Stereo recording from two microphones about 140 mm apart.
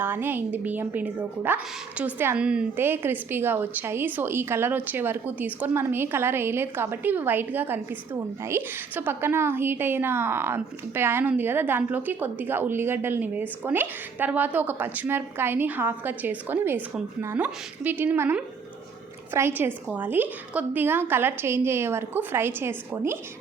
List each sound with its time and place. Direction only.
0.0 s a woman's voice: 15° right (ahead or behind)